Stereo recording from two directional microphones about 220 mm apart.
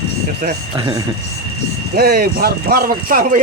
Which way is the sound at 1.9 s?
40° right (ahead or behind).